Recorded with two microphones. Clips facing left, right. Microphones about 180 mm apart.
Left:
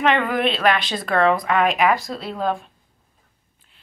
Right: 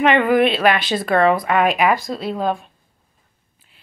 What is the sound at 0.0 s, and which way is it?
Speech, 5° right (ahead or behind).